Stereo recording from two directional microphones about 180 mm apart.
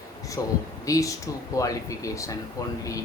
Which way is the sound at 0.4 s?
20° left (ahead or behind).